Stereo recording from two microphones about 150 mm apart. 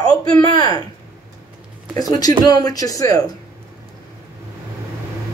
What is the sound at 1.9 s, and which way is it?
Speech, 25° left (ahead or behind).